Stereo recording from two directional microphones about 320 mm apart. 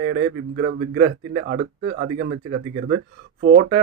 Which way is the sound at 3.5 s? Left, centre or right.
Right.